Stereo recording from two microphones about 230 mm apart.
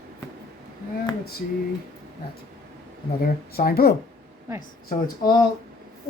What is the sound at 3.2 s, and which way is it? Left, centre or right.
Speech, left.